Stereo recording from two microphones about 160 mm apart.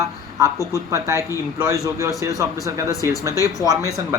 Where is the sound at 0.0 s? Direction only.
20° right (ahead or behind).